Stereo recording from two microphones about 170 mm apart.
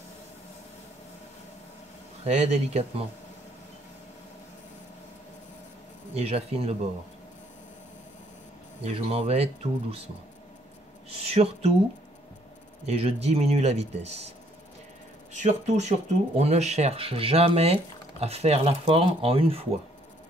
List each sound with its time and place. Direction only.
2.2 s speech: 40° right (ahead or behind)
6.1 s speech: 35° right (ahead or behind)
8.8 s speech: 35° right (ahead or behind)
11.1 s speech: 35° right (ahead or behind)
12.8 s speech: 35° right (ahead or behind)
15.3 s speech: 45° right (ahead or behind)